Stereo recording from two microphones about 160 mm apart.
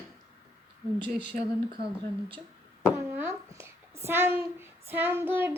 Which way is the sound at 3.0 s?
15° right (ahead or behind).